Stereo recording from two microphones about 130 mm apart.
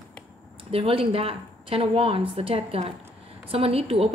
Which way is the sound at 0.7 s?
45° right (ahead or behind).